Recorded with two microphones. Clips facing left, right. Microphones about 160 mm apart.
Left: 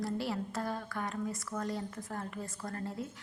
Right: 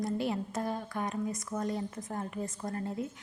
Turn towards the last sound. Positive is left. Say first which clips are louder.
# right 4 dB
turn(degrees=-20)  # may be behind; listen again after turning